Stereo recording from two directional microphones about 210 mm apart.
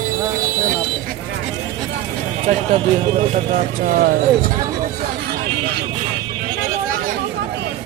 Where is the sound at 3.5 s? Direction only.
40° right (ahead or behind).